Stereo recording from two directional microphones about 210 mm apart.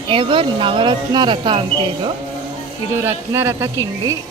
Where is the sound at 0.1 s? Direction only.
25° right (ahead or behind).